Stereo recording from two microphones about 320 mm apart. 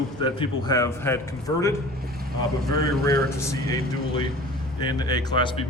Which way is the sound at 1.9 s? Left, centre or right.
Right.